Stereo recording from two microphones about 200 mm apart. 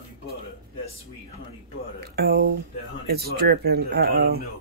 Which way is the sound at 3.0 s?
55° right (ahead or behind).